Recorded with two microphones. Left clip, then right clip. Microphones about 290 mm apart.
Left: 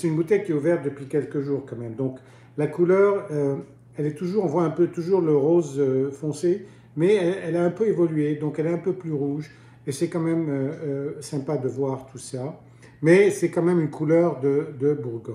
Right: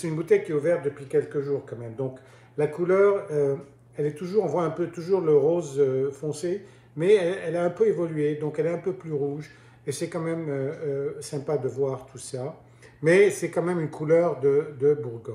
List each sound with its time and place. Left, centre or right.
0.0 s speech: centre